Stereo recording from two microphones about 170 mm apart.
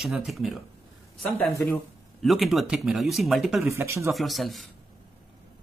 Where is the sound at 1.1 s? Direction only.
10° left (ahead or behind).